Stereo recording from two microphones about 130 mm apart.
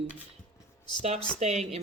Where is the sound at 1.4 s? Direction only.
55° right (ahead or behind).